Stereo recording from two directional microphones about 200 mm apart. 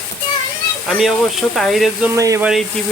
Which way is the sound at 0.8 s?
Centre (ahead or behind).